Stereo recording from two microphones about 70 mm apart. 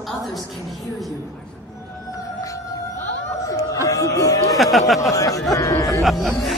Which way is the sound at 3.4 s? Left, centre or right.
Left.